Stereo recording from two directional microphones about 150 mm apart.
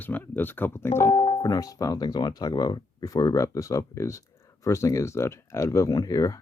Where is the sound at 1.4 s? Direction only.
25° left (ahead or behind).